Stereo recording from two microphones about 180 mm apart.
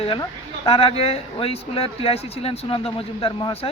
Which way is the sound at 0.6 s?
30° left (ahead or behind).